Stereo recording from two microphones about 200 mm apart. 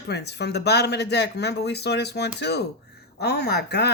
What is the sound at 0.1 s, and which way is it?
Speech, 55° left (ahead or behind).